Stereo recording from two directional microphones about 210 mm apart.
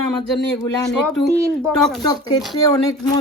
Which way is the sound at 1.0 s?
Centre (ahead or behind).